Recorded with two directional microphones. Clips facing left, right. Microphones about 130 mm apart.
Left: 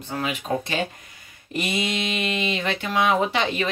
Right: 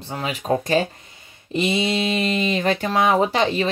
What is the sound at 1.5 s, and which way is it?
Speech, 25° right (ahead or behind).